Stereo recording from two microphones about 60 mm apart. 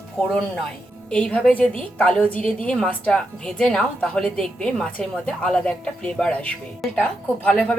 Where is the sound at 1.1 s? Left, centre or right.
Centre.